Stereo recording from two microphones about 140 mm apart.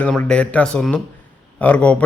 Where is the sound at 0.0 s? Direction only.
10° left (ahead or behind).